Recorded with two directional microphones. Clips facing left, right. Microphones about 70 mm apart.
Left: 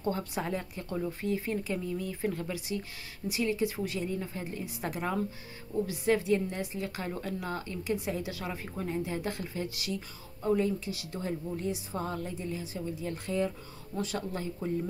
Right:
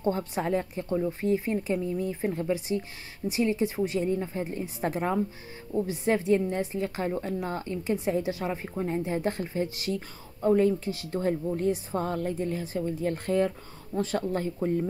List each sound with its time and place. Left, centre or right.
0.0 s a woman's voice: right